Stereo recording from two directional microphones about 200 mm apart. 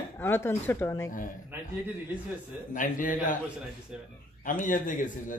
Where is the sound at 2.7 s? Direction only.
40° left (ahead or behind).